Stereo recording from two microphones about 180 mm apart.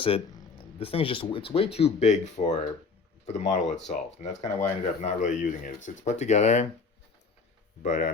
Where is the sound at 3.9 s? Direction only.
40° left (ahead or behind).